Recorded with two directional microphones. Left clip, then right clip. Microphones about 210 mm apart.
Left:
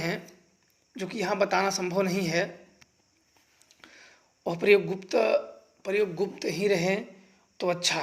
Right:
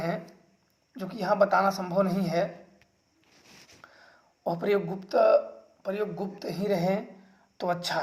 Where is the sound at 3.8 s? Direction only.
45° left (ahead or behind).